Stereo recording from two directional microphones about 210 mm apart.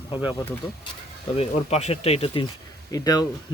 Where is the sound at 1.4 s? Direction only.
30° left (ahead or behind).